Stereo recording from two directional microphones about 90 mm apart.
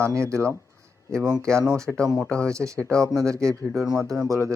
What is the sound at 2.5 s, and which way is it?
Speech, 35° right (ahead or behind).